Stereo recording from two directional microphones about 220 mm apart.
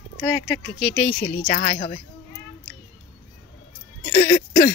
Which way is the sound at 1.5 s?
35° left (ahead or behind).